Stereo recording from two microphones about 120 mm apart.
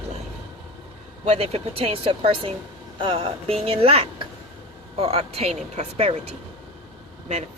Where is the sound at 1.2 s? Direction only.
55° right (ahead or behind).